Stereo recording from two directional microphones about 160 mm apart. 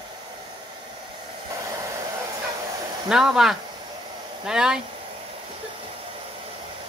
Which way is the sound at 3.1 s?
5° right (ahead or behind).